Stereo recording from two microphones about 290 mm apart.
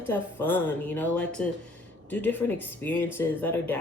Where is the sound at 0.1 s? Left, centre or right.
Centre.